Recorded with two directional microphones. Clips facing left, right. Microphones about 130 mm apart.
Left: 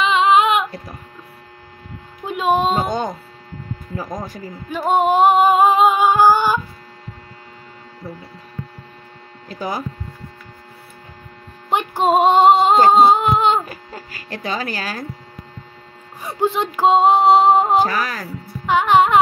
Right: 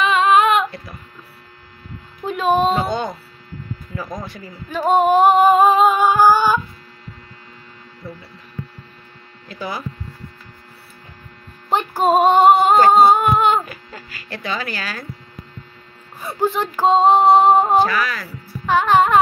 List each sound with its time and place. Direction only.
0.0 s female singing: 15° left (ahead or behind)
2.2 s speech: 15° left (ahead or behind)
2.9 s speech: 45° left (ahead or behind)
4.6 s singing: 15° left (ahead or behind)
9.5 s speech: 40° left (ahead or behind)
11.9 s music: 20° left (ahead or behind)
13.7 s speech: 40° left (ahead or behind)
16.2 s female singing: 20° left (ahead or behind)
17.8 s speech: 40° left (ahead or behind)
18.7 s music: 20° left (ahead or behind)